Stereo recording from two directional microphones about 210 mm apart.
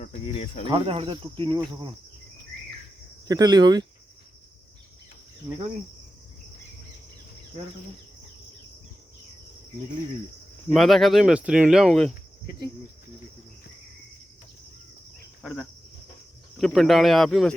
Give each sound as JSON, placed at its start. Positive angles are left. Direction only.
{"t": 0.0, "sound": "cricket", "side_deg": 35}
{"t": 0.7, "sound": "cricket", "side_deg": -25}
{"t": 3.2, "sound": "cricket", "side_deg": -20}
{"t": 10.7, "sound": "speech", "side_deg": 0}
{"t": 15.4, "sound": "speech", "side_deg": 0}